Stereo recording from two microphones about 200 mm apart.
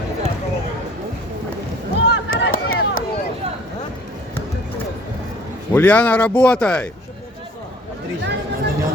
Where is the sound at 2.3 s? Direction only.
90° left.